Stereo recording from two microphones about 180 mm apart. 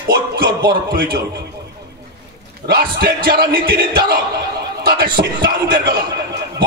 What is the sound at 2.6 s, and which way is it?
A man's voice, 60° right (ahead or behind).